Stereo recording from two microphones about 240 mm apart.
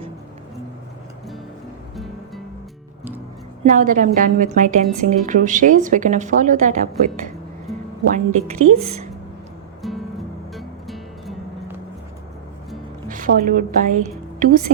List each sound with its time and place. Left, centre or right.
3.6 s speech: right
7.7 s music: centre
8.1 s a woman's voice: right
9.8 s music: centre
13.1 s a woman's voice: right